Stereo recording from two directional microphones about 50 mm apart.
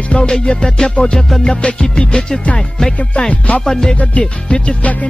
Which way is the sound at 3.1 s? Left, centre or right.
Left.